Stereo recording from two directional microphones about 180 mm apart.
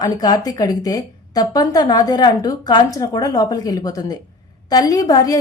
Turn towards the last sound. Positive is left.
turn(degrees=20)  # may be behind; listen again after turning